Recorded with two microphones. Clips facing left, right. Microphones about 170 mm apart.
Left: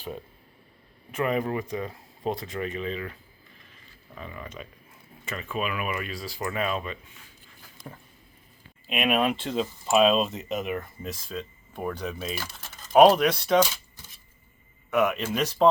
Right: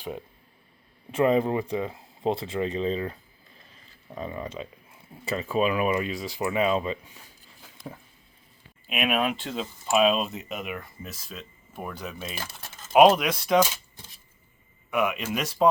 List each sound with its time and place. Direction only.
1.1 s speech: 30° right (ahead or behind)
8.9 s speech: 5° right (ahead or behind)
14.8 s speech: 10° right (ahead or behind)